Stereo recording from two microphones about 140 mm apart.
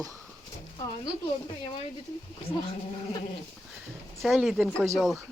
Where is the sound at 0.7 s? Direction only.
30° left (ahead or behind).